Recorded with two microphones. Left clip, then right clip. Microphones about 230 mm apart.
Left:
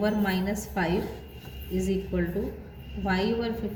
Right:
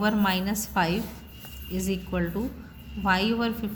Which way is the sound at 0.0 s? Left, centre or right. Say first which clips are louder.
Right 2 dB; right.